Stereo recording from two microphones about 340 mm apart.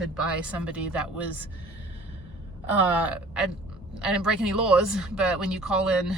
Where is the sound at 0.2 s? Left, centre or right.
Centre.